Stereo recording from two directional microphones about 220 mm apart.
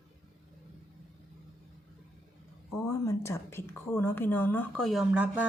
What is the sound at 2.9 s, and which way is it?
Speech, 15° left (ahead or behind).